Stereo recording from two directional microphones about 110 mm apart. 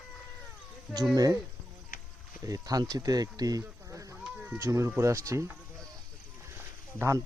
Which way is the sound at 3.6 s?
25° right (ahead or behind).